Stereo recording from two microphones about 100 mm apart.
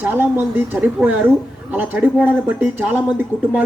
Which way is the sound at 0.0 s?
20° right (ahead or behind).